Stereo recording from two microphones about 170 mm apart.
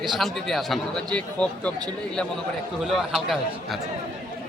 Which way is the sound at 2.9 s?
Centre (ahead or behind).